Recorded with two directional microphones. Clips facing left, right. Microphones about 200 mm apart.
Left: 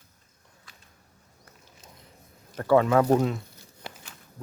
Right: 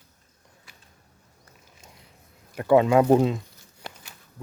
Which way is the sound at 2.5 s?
15° right (ahead or behind).